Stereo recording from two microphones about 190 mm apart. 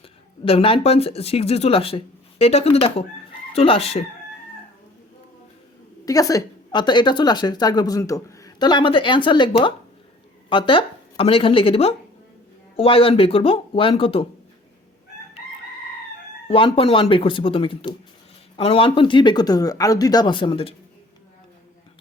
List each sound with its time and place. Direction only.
0.4 s speech: 30° left (ahead or behind)
6.1 s a woman's voice: 20° left (ahead or behind)
16.5 s a woman's voice: 30° left (ahead or behind)